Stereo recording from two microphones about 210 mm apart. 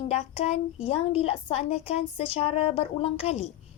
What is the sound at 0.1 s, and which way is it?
A woman's voice, 30° left (ahead or behind).